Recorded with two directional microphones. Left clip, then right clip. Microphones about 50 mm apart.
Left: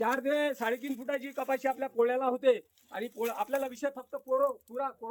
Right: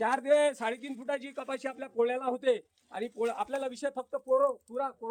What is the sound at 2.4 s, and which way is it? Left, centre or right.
A man's voice, left.